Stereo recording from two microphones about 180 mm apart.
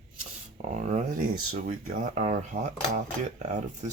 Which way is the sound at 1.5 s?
50° right (ahead or behind).